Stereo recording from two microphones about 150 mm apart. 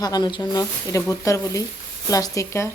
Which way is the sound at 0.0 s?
30° left (ahead or behind).